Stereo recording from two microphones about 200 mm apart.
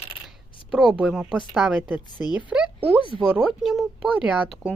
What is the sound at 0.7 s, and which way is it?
A woman's voice, 5° right (ahead or behind).